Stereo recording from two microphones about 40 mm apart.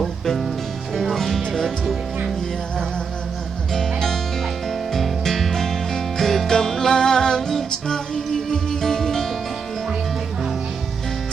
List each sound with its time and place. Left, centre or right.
0.0 s music: centre
3.7 s music: centre